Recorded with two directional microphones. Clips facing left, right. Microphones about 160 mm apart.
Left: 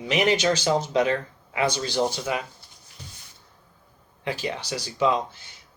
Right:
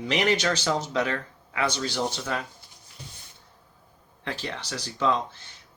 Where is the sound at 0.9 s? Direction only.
20° left (ahead or behind).